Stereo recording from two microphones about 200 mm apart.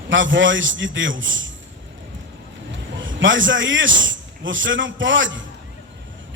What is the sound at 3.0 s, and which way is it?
A man's voice, 70° right (ahead or behind).